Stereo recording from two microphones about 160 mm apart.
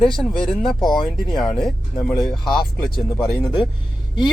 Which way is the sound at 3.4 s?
30° left (ahead or behind).